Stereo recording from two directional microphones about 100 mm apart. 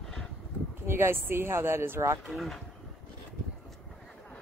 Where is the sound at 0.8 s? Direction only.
25° right (ahead or behind).